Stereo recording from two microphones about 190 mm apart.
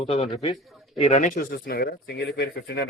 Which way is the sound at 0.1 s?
35° left (ahead or behind).